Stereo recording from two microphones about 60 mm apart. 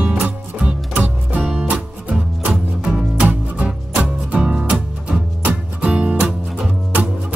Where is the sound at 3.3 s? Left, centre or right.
Right.